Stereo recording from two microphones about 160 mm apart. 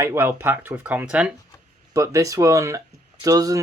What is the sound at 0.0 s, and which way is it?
Speech, 15° right (ahead or behind).